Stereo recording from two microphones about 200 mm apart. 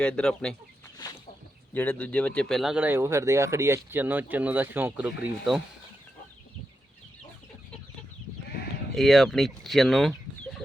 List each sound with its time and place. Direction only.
0.0 s speech: 5° left (ahead or behind)
1.0 s a sound: 20° left (ahead or behind)
1.7 s speech: 5° left (ahead or behind)
9.0 s speech: centre (ahead or behind)